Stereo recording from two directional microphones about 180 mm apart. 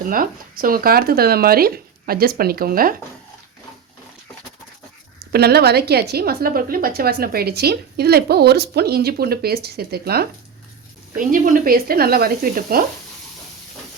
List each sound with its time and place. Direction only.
0.1 s a woman's voice: 50° right (ahead or behind)
5.3 s a woman's voice: 60° right (ahead or behind)
11.1 s a woman's voice: 50° right (ahead or behind)